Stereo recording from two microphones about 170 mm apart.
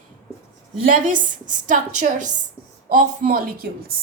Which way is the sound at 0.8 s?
50° right (ahead or behind).